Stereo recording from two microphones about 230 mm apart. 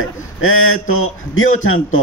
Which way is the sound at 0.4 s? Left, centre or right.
Left.